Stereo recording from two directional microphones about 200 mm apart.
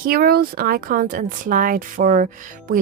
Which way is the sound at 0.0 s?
50° right (ahead or behind).